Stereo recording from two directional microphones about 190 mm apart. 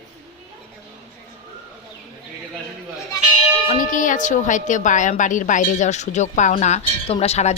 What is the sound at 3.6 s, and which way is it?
A woman's voice, 45° left (ahead or behind).